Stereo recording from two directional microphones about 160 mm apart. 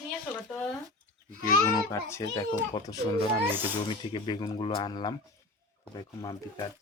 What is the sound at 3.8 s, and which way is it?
A child's voice, 30° left (ahead or behind).